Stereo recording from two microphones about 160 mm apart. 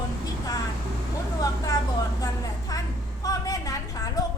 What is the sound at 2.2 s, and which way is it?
A woman's voice, 25° left (ahead or behind).